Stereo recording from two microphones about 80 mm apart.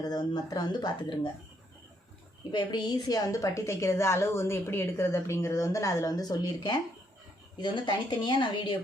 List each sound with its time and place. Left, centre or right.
0.0 s speech: left
2.5 s a woman's voice: left
7.5 s speech: left